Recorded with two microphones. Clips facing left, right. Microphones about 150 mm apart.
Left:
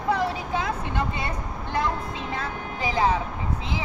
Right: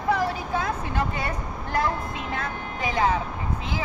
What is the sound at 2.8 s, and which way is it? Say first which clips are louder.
Speech: even; 30° left (ahead or behind).